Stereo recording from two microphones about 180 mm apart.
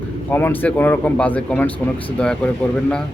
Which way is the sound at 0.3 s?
10° left (ahead or behind).